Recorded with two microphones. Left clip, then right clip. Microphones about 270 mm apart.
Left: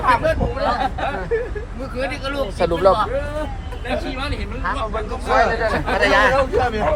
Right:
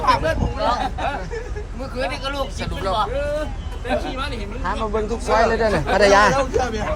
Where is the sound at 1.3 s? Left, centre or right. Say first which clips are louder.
Left 9 dB; centre.